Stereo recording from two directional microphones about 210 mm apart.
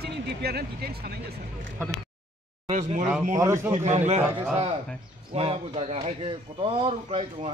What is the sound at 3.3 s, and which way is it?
Speech, 15° right (ahead or behind).